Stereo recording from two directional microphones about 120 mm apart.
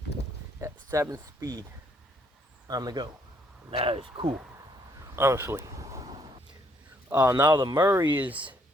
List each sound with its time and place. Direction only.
0.6 s speech: 30° right (ahead or behind)
2.6 s speech: 35° right (ahead or behind)
3.7 s speech: 50° right (ahead or behind)
5.1 s speech: 20° right (ahead or behind)
7.2 s speech: 30° right (ahead or behind)
7.9 s speech: 20° right (ahead or behind)